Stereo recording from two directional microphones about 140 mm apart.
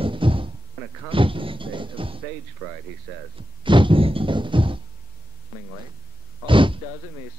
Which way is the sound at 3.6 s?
35° right (ahead or behind).